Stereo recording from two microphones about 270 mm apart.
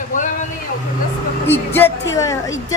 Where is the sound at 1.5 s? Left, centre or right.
Centre.